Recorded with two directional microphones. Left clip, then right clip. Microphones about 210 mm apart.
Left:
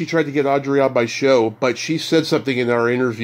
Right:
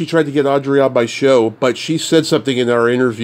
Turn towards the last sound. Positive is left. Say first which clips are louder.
# right 4 dB
turn(degrees=-30)  # may be behind; listen again after turning